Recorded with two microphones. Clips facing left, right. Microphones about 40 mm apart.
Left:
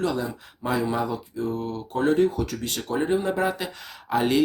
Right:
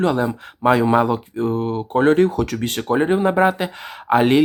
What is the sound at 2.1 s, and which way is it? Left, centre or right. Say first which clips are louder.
Speech: right 5 dB; right.